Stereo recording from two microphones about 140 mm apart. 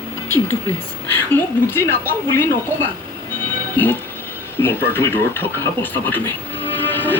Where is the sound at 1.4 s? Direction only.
15° left (ahead or behind).